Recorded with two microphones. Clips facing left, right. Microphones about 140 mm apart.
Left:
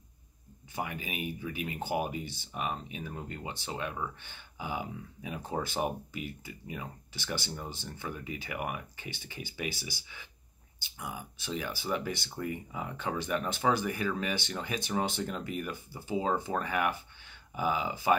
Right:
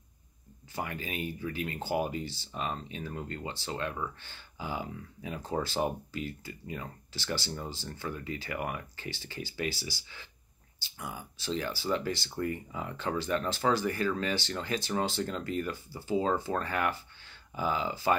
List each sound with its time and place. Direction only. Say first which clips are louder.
0.7 s speech: right 1 dB; 15° left (ahead or behind)